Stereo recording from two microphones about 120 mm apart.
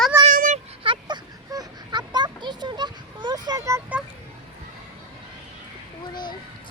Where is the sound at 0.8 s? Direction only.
40° right (ahead or behind).